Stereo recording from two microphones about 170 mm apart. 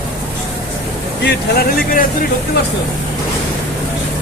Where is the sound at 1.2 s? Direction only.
70° left (ahead or behind).